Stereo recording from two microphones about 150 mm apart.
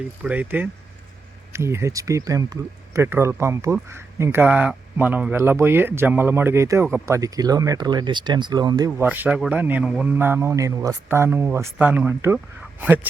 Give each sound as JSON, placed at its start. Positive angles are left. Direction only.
{"t": 0.2, "sound": "a man's voice", "side_deg": -10}
{"t": 8.9, "sound": "speech", "side_deg": -10}